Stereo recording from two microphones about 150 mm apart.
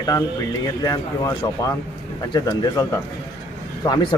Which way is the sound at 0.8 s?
25° left (ahead or behind).